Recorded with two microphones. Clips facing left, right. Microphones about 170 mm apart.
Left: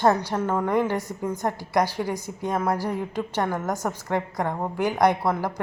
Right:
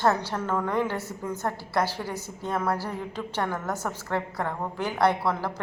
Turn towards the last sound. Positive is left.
turn(degrees=15)  # may be behind; listen again after turning